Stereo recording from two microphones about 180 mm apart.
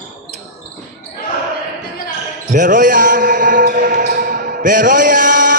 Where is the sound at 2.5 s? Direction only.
50° right (ahead or behind).